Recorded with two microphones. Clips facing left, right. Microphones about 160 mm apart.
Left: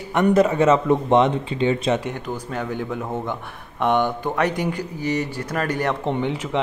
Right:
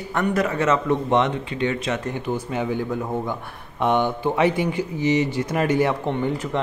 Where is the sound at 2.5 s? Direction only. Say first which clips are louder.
Even; 5° right (ahead or behind).